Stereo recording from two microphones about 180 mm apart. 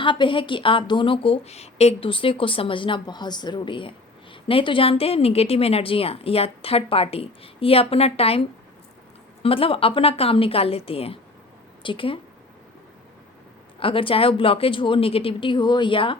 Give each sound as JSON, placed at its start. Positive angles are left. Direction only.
{"t": 0.0, "sound": "a woman's voice", "side_deg": 25}
{"t": 13.7, "sound": "a woman's voice", "side_deg": 30}